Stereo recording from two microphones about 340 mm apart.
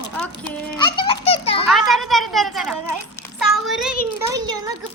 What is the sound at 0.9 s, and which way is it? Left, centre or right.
Speech, centre.